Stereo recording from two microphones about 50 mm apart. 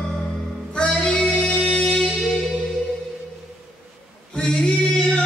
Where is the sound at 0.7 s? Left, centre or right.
Centre.